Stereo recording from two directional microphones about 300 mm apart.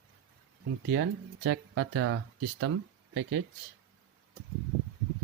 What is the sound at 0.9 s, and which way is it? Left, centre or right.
Speech, right.